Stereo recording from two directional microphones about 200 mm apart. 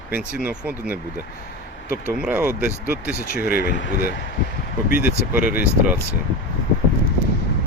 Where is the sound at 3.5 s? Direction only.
50° left (ahead or behind).